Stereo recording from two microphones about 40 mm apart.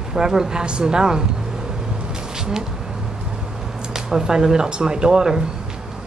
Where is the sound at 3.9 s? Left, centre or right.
Centre.